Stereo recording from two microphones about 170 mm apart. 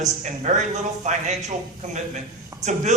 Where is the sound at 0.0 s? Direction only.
45° right (ahead or behind).